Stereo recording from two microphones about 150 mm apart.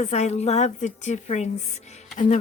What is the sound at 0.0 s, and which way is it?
A woman's voice, 50° left (ahead or behind).